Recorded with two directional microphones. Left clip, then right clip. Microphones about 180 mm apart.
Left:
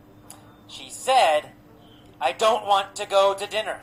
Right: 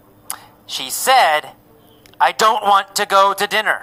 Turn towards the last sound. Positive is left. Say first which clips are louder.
# right 8 dB
turn(degrees=-60)  # may be behind; listen again after turning